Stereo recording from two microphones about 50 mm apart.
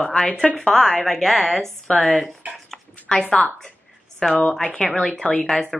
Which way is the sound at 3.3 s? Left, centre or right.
Centre.